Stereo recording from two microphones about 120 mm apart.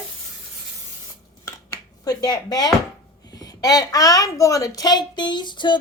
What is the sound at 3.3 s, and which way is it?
A woman's voice, 30° left (ahead or behind).